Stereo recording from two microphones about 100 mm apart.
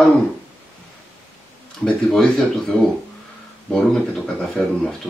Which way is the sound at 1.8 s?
10° left (ahead or behind).